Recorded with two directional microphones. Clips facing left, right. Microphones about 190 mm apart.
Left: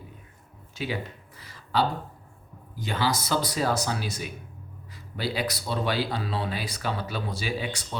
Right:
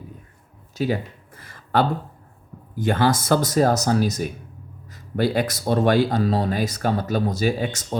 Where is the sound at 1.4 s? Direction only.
50° right (ahead or behind).